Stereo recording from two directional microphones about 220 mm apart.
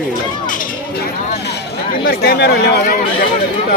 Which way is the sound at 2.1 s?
45° left (ahead or behind).